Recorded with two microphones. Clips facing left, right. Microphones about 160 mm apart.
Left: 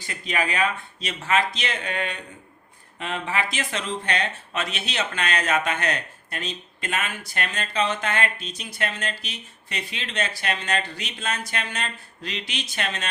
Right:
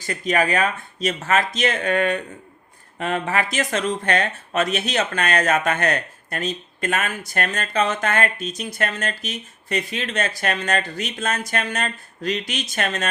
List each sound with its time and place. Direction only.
0.0 s speech: 45° right (ahead or behind)